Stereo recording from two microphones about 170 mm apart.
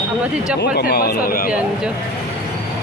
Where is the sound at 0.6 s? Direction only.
70° left (ahead or behind).